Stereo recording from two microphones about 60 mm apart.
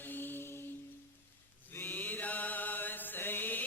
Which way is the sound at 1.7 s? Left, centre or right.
Left.